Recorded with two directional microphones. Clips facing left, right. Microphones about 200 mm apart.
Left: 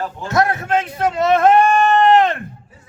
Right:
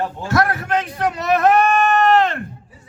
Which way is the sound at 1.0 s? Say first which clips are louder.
Left 3 dB; 25° left (ahead or behind).